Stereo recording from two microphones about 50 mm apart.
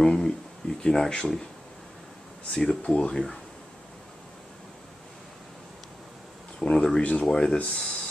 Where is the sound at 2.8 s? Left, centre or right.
Centre.